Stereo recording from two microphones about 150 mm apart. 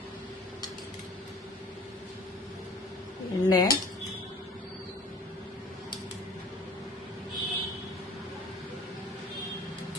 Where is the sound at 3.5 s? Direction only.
25° left (ahead or behind).